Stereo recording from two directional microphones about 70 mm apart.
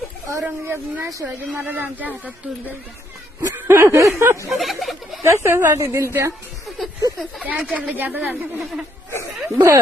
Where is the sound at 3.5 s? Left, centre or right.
Right.